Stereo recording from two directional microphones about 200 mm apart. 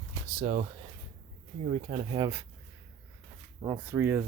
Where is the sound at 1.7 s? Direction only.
30° right (ahead or behind).